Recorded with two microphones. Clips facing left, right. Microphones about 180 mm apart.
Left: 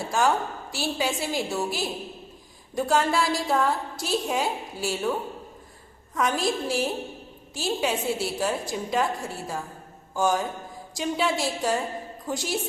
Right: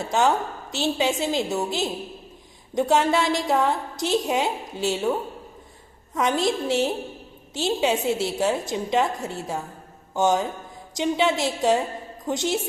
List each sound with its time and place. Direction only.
0.0 s a woman's voice: 20° right (ahead or behind)
6.1 s a woman's voice: 20° right (ahead or behind)